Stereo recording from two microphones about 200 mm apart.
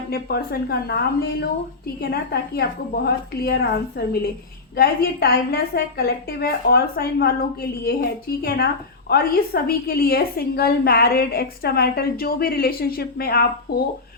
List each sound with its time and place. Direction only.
0.1 s a woman's voice: 50° left (ahead or behind)
8.4 s a woman's voice: 50° left (ahead or behind)